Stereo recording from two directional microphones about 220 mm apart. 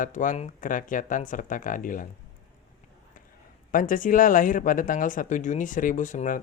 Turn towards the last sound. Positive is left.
turn(degrees=35)  # may be behind; listen again after turning